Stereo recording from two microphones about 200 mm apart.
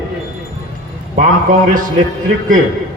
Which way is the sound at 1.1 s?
40° right (ahead or behind).